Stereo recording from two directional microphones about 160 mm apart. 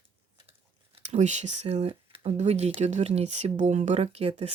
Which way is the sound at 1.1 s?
45° right (ahead or behind).